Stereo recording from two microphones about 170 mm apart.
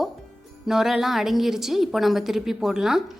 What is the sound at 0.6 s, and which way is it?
A woman's voice, centre (ahead or behind).